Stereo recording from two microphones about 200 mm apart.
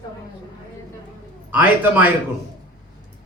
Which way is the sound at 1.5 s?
10° right (ahead or behind).